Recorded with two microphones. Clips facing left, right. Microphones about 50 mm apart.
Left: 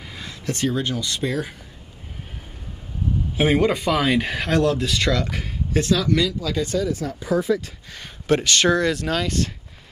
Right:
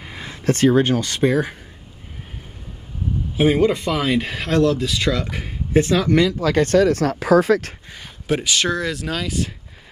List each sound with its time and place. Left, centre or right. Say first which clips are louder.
0.0 s a sound: right 2 dB; right
0.4 s speech: right 8 dB; right
3.3 s speech: right 2 dB; centre; by 6.3 s right
6.4 s speech: right 8 dB; right
8.3 s speech: left 2 dB; centre